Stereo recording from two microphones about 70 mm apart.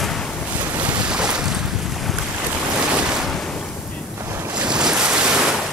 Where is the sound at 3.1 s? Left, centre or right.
Centre.